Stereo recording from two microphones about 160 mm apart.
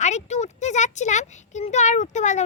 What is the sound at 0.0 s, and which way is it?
A child's voice, 45° left (ahead or behind).